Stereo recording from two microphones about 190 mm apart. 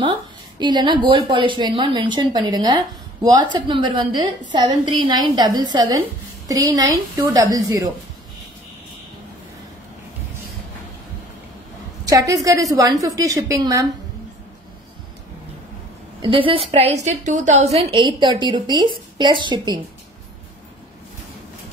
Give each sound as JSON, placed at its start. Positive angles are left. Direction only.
{"t": 0.0, "sound": "a woman's voice", "side_deg": -25}
{"t": 12.0, "sound": "a woman's voice", "side_deg": -20}
{"t": 16.2, "sound": "a woman's voice", "side_deg": -25}
{"t": 17.7, "sound": "a woman's voice", "side_deg": -25}